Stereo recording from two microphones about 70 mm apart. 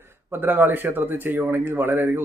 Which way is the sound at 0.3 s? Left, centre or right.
Right.